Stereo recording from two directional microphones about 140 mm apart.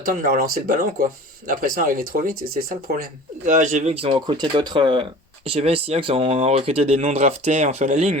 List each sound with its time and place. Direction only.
0.0 s speech: 85° right; by 3.9 s 60° right (ahead or behind)
3.9 s speech: 40° right (ahead or behind)